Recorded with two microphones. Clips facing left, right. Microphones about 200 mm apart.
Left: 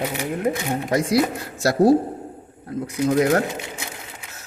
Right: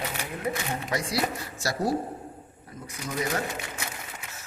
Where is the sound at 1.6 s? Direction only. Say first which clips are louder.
Left 12 dB; 60° left (ahead or behind).